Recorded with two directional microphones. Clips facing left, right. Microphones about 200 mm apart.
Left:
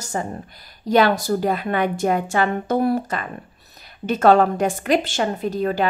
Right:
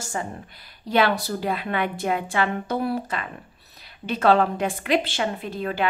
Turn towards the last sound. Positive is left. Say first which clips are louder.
# left 6 dB
turn(degrees=40)  # may be behind; listen again after turning